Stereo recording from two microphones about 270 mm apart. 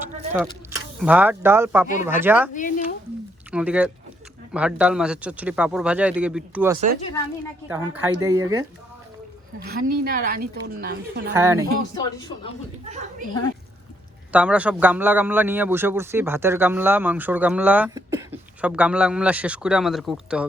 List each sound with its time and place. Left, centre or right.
0.9 s a man's voice: centre
2.5 s a sound: left
3.5 s a man's voice: centre
9.6 s a woman's voice: right
11.3 s a man's voice: centre
11.9 s speech: centre
12.8 s a woman's voice: right
14.3 s a man's voice: centre